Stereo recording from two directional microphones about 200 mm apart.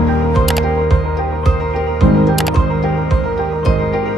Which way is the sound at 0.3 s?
Centre (ahead or behind).